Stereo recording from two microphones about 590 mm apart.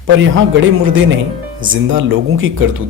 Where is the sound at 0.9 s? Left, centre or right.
Centre.